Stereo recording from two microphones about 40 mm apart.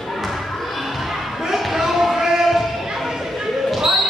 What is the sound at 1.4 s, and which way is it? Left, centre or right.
Basketball bounce, centre.